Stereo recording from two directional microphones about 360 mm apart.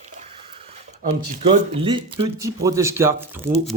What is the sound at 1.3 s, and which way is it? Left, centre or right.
Speech, centre.